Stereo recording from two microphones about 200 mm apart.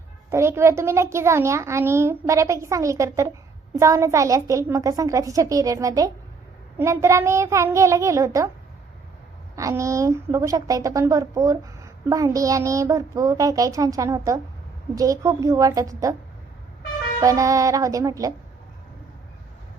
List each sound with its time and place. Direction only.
0.3 s a woman's voice: 15° right (ahead or behind)
9.6 s a woman's voice: 15° right (ahead or behind)
17.2 s a woman's voice: 15° right (ahead or behind)